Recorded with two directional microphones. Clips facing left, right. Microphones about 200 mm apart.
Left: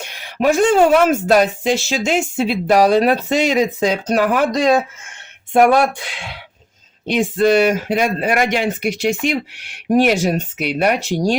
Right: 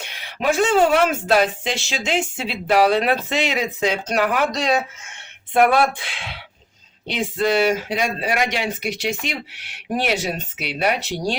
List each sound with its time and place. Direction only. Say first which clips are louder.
0.0 s a woman's voice: left 6 dB; 45° left (ahead or behind)